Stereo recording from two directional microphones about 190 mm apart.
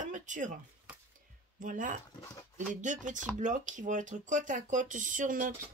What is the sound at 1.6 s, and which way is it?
Speech, 45° right (ahead or behind).